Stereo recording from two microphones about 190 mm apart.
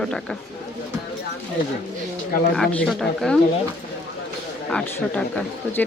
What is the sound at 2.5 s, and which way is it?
Speech, 5° left (ahead or behind).